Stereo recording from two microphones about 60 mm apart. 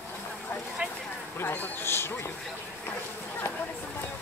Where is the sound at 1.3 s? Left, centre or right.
Left.